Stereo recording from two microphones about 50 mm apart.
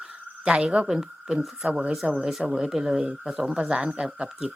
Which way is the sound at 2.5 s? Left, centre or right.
Centre.